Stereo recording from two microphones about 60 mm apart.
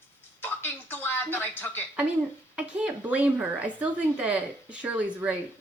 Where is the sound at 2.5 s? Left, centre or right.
Centre.